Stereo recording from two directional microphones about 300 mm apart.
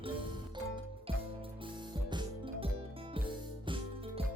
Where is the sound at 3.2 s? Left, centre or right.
Centre.